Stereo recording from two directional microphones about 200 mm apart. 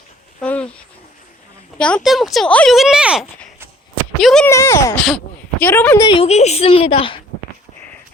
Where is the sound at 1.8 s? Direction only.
5° left (ahead or behind).